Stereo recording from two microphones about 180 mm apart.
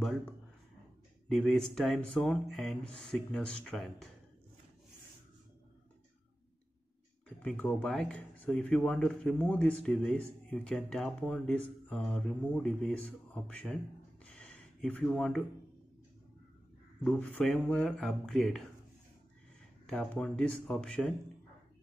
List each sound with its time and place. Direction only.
1.3 s speech: centre (ahead or behind)
7.4 s speech: 5° left (ahead or behind)
14.2 s gasp: 5° left (ahead or behind)
17.0 s speech: 10° left (ahead or behind)
19.9 s speech: 5° left (ahead or behind)